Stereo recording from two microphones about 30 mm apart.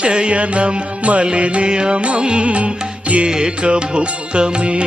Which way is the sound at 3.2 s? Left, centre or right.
Right.